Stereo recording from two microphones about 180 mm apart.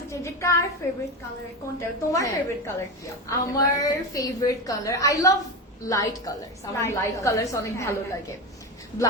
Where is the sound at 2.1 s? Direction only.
15° left (ahead or behind).